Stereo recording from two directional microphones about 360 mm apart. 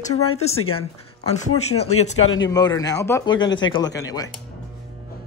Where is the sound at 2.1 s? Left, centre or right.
Left.